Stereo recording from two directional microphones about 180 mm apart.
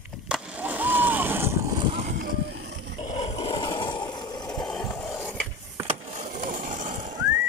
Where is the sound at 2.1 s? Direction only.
60° right (ahead or behind).